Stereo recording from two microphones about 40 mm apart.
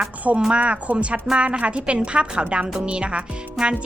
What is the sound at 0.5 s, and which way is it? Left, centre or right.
Speech, right.